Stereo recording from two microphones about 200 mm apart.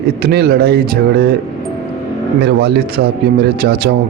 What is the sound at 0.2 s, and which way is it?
Speech, 55° right (ahead or behind).